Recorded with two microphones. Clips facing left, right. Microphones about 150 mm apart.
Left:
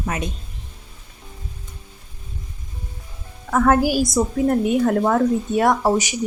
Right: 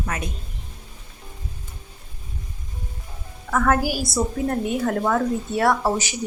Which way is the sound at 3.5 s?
25° left (ahead or behind).